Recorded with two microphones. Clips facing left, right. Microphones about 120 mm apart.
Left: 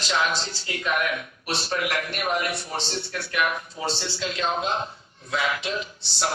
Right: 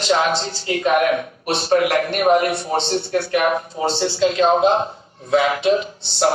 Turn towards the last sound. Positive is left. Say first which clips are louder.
# right 10 dB
turn(degrees=-50)  # may be behind; listen again after turning